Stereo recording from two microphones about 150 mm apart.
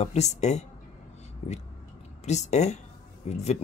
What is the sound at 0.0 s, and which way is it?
Speech, 50° left (ahead or behind).